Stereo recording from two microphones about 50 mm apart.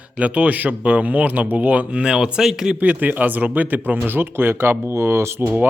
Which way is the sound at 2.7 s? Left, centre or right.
Right.